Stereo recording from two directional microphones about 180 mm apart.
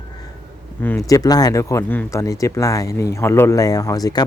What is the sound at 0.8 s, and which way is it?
Speech, 10° left (ahead or behind).